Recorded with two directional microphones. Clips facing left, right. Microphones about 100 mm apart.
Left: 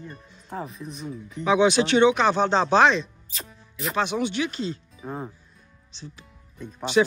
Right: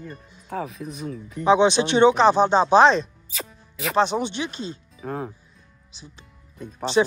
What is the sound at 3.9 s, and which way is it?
Speech, 30° right (ahead or behind).